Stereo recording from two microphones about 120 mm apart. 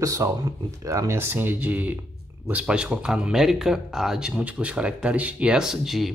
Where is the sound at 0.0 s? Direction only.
25° right (ahead or behind).